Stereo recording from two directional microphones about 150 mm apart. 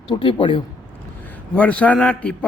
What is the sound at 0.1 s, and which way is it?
Speech, 35° left (ahead or behind).